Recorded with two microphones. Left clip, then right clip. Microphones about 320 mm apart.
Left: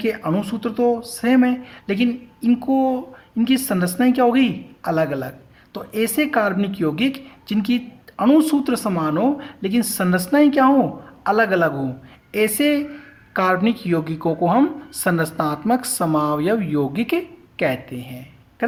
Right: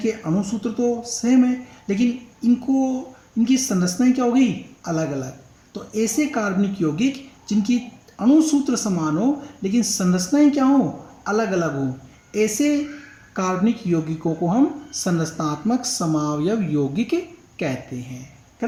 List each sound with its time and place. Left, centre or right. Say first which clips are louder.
0.0 s speech: left 2 dB; left